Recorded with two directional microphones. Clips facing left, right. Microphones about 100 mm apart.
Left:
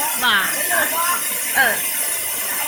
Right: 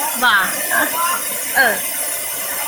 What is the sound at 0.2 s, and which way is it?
Speech, 25° right (ahead or behind).